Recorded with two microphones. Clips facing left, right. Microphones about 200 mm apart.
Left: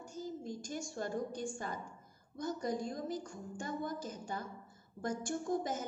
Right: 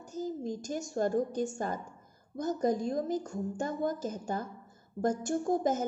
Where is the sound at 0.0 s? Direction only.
40° right (ahead or behind).